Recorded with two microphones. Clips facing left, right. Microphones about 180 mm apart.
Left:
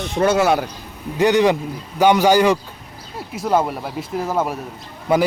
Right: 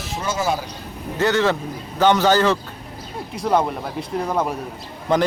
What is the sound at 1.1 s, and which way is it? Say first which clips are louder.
A man's voice: left 4 dB; 15° left (ahead or behind).